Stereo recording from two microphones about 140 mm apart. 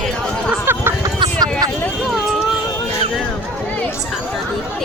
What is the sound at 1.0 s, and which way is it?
Vehicle, 30° right (ahead or behind).